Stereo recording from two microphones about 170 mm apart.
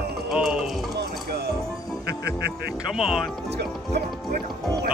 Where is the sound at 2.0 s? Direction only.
75° right (ahead or behind).